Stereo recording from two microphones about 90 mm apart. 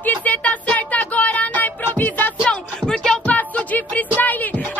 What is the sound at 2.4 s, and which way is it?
Music, 10° left (ahead or behind).